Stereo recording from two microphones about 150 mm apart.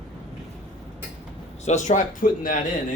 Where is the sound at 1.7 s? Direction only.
55° left (ahead or behind).